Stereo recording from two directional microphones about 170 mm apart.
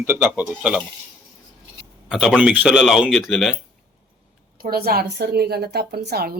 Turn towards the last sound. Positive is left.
turn(degrees=-70)  # may be behind; listen again after turning